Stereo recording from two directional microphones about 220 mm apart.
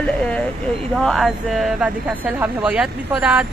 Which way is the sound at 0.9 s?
Centre (ahead or behind).